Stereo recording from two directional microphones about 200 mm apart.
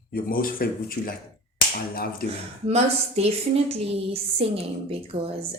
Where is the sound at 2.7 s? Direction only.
30° right (ahead or behind).